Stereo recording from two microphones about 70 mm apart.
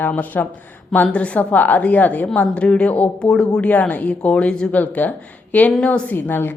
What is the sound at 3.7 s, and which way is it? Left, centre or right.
A woman's voice, left.